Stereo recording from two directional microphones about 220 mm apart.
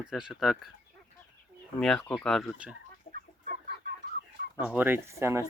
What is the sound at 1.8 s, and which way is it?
Speech, 5° left (ahead or behind).